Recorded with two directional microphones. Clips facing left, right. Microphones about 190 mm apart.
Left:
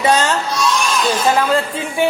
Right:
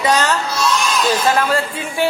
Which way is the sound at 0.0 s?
25° left (ahead or behind).